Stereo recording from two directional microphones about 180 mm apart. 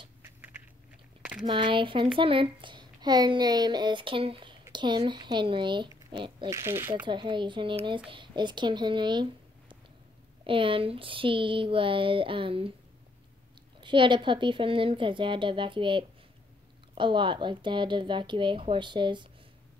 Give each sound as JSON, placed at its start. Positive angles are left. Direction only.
{"t": 0.2, "sound": "biting", "side_deg": -10}
{"t": 1.4, "sound": "a child's voice", "side_deg": -25}
{"t": 6.5, "sound": "speech", "side_deg": -15}
{"t": 7.1, "sound": "a child's voice", "side_deg": -25}
{"t": 13.7, "sound": "a child's voice", "side_deg": -25}